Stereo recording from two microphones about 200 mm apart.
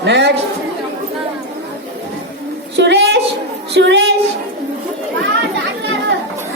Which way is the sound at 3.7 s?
65° right (ahead or behind).